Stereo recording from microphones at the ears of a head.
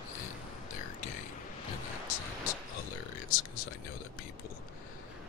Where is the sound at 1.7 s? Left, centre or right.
Left.